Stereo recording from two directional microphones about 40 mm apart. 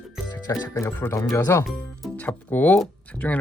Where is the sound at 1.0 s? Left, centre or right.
Left.